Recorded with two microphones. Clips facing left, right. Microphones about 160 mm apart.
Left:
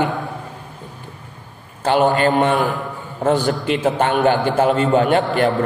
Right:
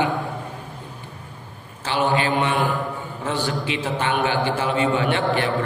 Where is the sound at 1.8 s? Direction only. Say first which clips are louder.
Left 6 dB; 50° left (ahead or behind).